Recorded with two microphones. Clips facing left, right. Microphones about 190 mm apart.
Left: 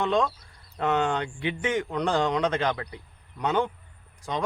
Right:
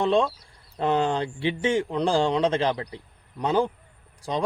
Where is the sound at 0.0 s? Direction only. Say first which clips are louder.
Right 3 dB; 30° right (ahead or behind).